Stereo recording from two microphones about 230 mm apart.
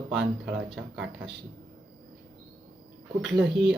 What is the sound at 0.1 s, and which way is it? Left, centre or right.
Speech, right.